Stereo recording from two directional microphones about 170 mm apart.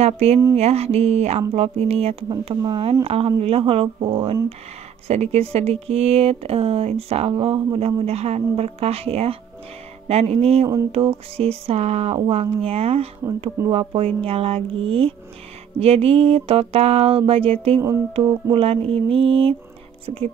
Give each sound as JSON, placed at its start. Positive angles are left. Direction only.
{"t": 0.0, "sound": "speech", "side_deg": -40}